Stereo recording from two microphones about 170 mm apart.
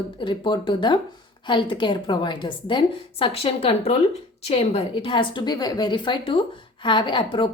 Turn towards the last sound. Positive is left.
turn(degrees=30)  # may be behind; listen again after turning